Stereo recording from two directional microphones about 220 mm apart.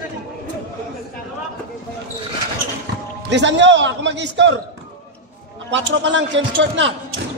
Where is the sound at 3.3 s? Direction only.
55° right (ahead or behind).